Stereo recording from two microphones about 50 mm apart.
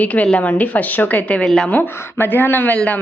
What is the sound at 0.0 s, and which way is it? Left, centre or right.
Speech, left.